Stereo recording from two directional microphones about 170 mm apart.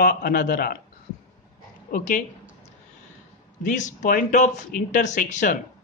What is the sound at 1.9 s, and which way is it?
Speech, 50° left (ahead or behind).